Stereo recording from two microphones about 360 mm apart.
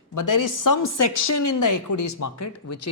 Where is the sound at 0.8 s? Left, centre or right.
Left.